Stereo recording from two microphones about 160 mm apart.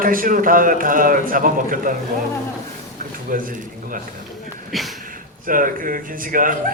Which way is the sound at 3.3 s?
60° right (ahead or behind).